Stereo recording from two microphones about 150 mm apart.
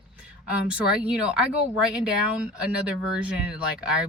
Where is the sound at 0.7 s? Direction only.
5° right (ahead or behind).